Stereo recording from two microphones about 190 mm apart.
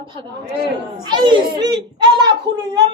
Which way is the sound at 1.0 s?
25° right (ahead or behind).